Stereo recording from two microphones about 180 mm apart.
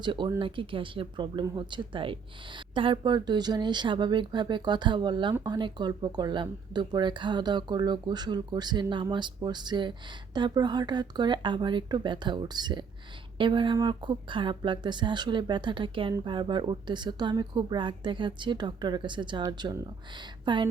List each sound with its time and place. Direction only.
0.0 s speech: 25° right (ahead or behind)